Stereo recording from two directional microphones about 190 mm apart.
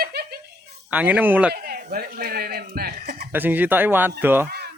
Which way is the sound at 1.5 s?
55° right (ahead or behind).